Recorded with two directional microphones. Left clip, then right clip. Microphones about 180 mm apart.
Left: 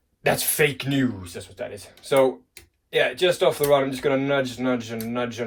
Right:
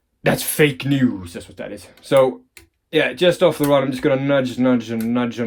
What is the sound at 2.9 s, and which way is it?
Speech, 55° right (ahead or behind).